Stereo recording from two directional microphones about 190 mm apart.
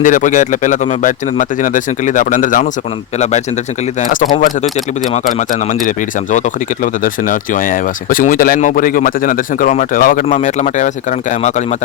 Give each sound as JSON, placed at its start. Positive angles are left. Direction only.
{"t": 0.0, "sound": "speech", "side_deg": 40}
{"t": 4.0, "sound": "speech", "side_deg": 45}